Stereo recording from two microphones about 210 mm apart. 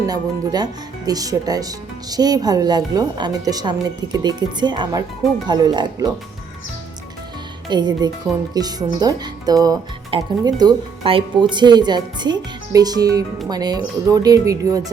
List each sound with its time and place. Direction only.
0.1 s speech: 20° right (ahead or behind)
7.7 s speech: 20° right (ahead or behind)